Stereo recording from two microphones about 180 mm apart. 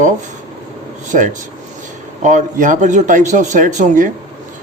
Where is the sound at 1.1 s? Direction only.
45° right (ahead or behind).